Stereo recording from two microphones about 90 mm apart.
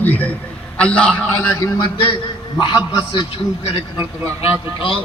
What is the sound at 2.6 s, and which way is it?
Speech, 55° left (ahead or behind).